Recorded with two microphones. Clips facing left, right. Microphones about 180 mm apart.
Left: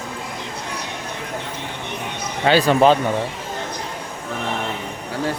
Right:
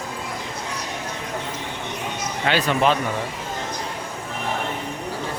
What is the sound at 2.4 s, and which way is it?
Speech, 35° left (ahead or behind).